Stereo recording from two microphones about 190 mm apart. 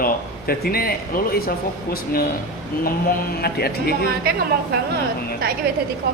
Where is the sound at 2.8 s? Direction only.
50° left (ahead or behind).